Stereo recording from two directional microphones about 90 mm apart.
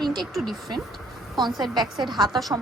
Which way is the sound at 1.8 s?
55° right (ahead or behind).